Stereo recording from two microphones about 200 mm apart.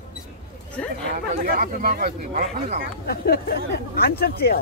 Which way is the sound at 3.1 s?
50° left (ahead or behind).